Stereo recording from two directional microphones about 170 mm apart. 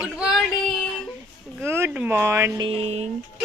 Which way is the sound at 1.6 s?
15° right (ahead or behind).